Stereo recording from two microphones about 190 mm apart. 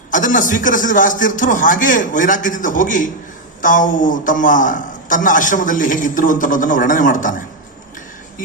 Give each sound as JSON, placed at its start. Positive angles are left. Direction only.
{"t": 0.1, "sound": "a man's voice", "side_deg": 45}